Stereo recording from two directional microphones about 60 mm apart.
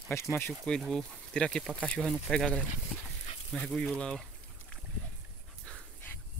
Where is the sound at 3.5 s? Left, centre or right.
Centre.